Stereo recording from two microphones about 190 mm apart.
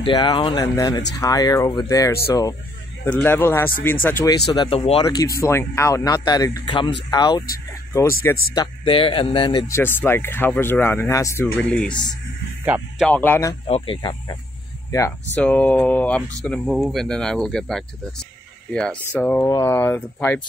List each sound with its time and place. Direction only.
0.0 s speech: 25° left (ahead or behind)
4.5 s speech: 30° left (ahead or behind)
5.0 s speech: 15° left (ahead or behind)
8.5 s speech: 30° left (ahead or behind); by 11.9 s 5° left (ahead or behind)
13.0 s speech: 10° left (ahead or behind)
13.7 s speech: 30° left (ahead or behind); by 20.4 s 10° left (ahead or behind)